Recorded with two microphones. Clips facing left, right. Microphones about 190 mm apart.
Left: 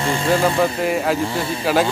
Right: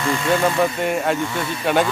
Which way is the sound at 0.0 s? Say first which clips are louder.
Left 1 dB; 30° left (ahead or behind).